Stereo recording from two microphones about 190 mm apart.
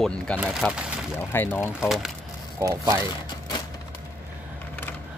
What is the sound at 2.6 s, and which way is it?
Speech, 15° right (ahead or behind).